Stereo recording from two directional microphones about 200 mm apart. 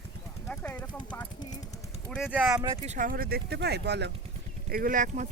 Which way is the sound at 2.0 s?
Centre (ahead or behind).